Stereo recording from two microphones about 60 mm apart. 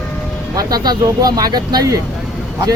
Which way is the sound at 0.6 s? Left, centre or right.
Right.